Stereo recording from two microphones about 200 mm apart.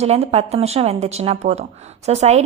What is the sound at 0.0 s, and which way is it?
A woman's voice, 30° right (ahead or behind).